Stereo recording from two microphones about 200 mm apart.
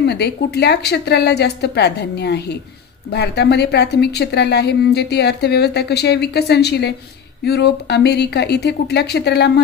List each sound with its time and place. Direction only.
0.0 s a woman's voice: 55° left (ahead or behind)